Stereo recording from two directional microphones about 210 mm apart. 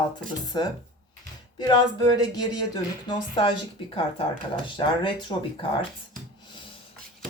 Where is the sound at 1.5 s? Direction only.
20° left (ahead or behind).